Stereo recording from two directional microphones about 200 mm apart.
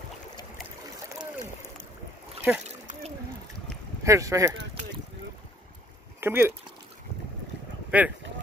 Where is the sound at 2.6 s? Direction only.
35° right (ahead or behind).